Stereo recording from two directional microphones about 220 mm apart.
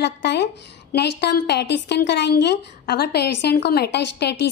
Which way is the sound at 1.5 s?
50° left (ahead or behind).